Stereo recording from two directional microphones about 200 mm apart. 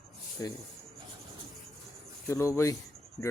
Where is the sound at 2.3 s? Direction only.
15° left (ahead or behind).